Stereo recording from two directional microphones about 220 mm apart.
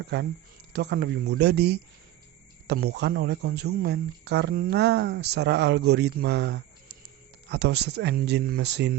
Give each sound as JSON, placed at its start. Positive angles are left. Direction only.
{"t": 0.1, "sound": "speech", "side_deg": -50}